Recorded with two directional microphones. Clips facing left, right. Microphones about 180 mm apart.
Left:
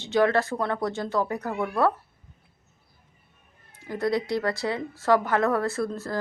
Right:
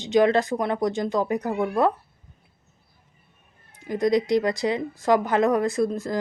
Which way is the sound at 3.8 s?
15° right (ahead or behind).